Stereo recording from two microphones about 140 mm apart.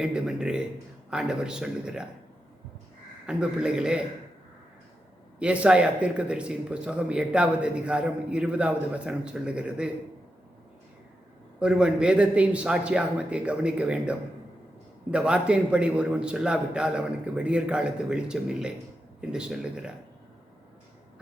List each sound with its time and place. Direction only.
0.0 s a sound: 5° right (ahead or behind)
1.1 s a man's voice: 5° right (ahead or behind)
3.2 s a man's voice: 5° right (ahead or behind)
5.4 s speech: 5° right (ahead or behind)
11.6 s a man's voice: 5° right (ahead or behind)